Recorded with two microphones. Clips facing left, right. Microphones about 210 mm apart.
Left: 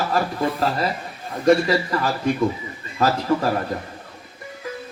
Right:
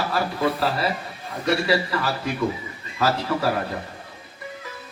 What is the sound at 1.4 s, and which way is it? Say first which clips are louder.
Speech: left 5 dB; 45° left (ahead or behind).